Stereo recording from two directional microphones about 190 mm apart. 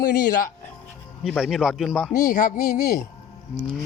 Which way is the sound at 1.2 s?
Centre (ahead or behind).